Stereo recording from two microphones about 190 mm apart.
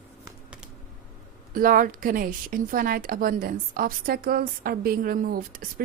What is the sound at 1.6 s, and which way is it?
Speech, 50° right (ahead or behind).